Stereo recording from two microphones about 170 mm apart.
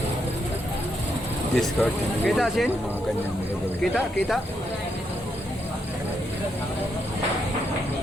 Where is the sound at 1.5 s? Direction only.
5° left (ahead or behind).